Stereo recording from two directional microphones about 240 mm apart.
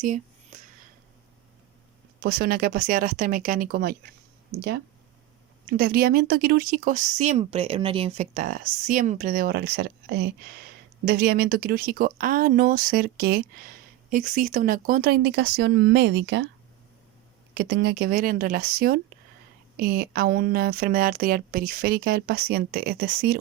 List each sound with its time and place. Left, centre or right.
0.0 s whispering: right
2.2 s speech: right
5.6 s speech: right
17.5 s speech: right